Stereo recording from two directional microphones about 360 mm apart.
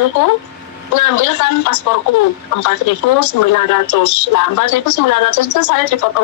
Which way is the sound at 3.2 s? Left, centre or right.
Left.